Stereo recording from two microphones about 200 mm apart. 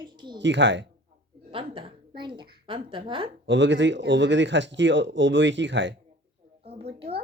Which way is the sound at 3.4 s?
65° right (ahead or behind).